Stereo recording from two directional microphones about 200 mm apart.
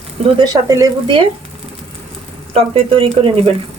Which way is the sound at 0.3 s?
20° right (ahead or behind).